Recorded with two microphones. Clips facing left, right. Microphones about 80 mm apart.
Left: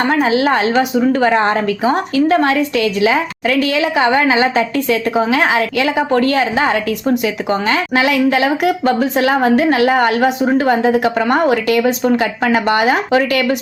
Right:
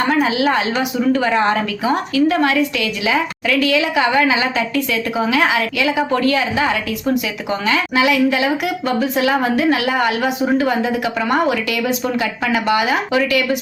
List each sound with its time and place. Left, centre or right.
0.1 s a woman's voice: left
7.7 s a woman's voice: left